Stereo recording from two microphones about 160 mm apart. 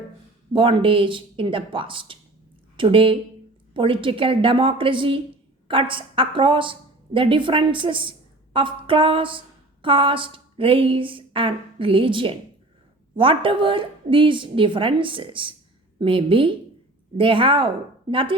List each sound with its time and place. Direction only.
0.5 s a woman's voice: 35° right (ahead or behind)